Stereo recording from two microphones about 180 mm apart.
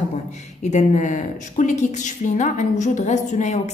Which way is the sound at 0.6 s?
40° left (ahead or behind).